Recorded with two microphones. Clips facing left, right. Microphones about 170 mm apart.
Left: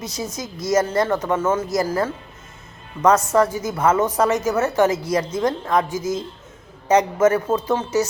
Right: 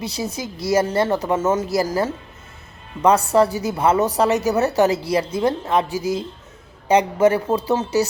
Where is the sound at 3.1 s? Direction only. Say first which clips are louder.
Right 1 dB; 35° right (ahead or behind).